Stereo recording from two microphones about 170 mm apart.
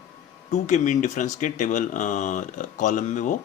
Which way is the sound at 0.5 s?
45° left (ahead or behind).